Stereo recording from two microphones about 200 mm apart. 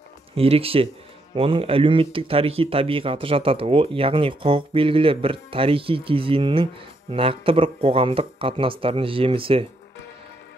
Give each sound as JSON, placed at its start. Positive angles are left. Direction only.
{"t": 0.4, "sound": "speech", "side_deg": -30}